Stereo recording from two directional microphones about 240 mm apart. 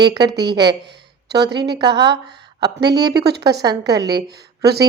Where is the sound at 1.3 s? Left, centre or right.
Right.